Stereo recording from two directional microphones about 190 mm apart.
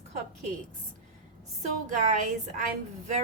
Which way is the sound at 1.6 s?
40° right (ahead or behind).